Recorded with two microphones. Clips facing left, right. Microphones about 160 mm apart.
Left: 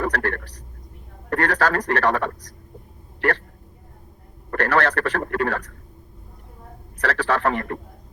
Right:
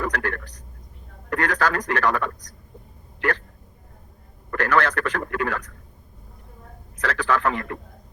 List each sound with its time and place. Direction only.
0.0 s a sound: 30° left (ahead or behind)
1.3 s a man's voice: 35° left (ahead or behind)
4.5 s a man's voice: 35° left (ahead or behind)
7.0 s a man's voice: 35° left (ahead or behind)